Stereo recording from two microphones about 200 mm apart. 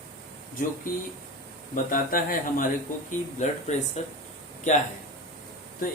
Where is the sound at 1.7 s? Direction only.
45° left (ahead or behind).